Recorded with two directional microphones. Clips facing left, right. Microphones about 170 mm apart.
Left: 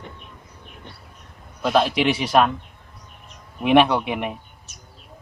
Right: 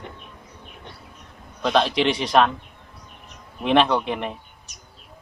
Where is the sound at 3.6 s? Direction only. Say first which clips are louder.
Left 2 dB; 10° left (ahead or behind).